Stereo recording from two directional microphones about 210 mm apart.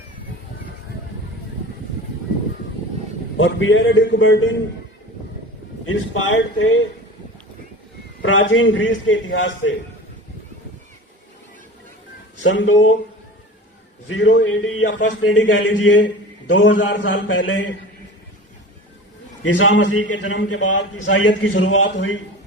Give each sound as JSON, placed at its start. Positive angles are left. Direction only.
{"t": 3.3, "sound": "a man's voice", "side_deg": 65}
{"t": 5.8, "sound": "a man's voice", "side_deg": 70}
{"t": 8.2, "sound": "a man's voice", "side_deg": 65}
{"t": 12.4, "sound": "a man's voice", "side_deg": 60}
{"t": 14.1, "sound": "a man's voice", "side_deg": 60}
{"t": 19.5, "sound": "a man's voice", "side_deg": 65}